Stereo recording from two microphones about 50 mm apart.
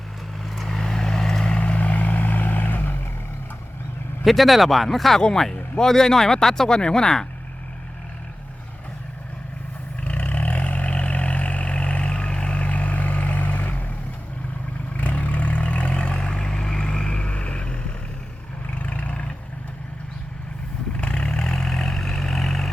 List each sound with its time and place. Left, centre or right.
0.4 s vehicle: centre
1.5 s vehicle: left
4.2 s speech: centre
10.0 s vehicle: left
14.9 s vehicle: left
18.7 s roaring cats: left
20.9 s vehicle: left